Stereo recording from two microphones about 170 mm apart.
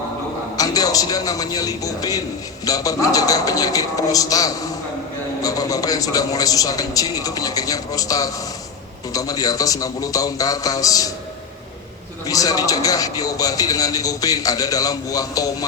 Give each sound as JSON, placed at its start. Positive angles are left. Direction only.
{"t": 0.5, "sound": "a man's voice", "side_deg": 20}
{"t": 12.2, "sound": "a man's voice", "side_deg": 20}